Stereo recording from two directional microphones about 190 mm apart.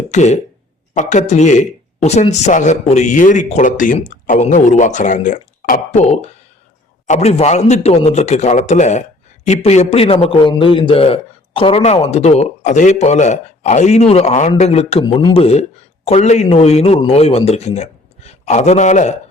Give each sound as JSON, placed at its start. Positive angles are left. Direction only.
{"t": 0.1, "sound": "speech", "side_deg": 40}